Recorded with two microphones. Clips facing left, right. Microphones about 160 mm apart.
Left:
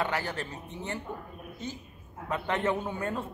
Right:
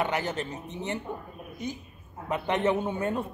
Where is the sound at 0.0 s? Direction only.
20° right (ahead or behind).